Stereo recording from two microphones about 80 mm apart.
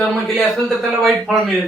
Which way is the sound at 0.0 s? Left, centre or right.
Centre.